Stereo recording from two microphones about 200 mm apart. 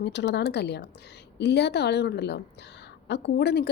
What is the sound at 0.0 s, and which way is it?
A woman's voice, 60° left (ahead or behind).